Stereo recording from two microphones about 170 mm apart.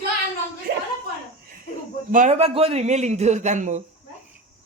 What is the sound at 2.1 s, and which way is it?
Speech, 50° right (ahead or behind).